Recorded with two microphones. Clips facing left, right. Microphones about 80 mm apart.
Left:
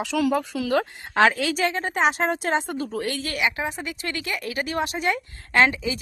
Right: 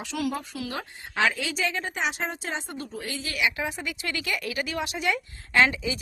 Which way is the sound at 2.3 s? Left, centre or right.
Left.